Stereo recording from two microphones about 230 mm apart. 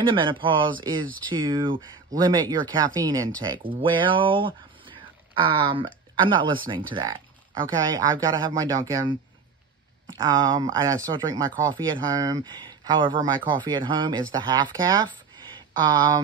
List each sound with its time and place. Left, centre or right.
0.0 s speech: right
10.1 s speech: centre